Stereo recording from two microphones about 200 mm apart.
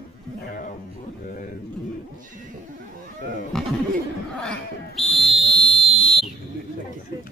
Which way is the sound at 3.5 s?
Centre (ahead or behind).